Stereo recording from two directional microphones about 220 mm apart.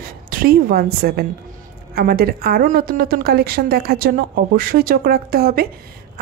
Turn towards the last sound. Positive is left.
turn(degrees=-40)  # may be behind; listen again after turning